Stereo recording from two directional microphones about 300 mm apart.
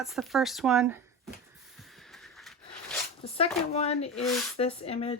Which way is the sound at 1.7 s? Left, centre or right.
Centre.